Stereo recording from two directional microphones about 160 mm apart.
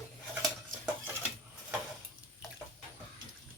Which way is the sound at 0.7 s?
55° right (ahead or behind).